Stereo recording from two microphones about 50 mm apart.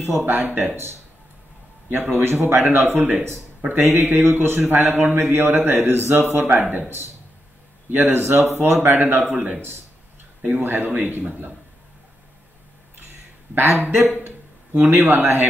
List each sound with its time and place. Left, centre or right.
0.0 s a man's voice: right
1.9 s a man's voice: right
4.6 s a man's voice: right
7.9 s a man's voice: right
13.6 s a man's voice: right